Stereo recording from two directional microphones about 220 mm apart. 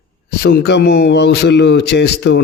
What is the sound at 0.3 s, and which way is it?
A man's voice, 45° left (ahead or behind).